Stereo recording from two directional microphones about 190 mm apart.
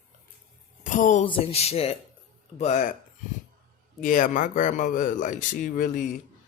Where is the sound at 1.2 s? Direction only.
30° left (ahead or behind).